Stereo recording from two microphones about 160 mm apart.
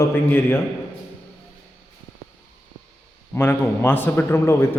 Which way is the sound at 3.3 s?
15° left (ahead or behind).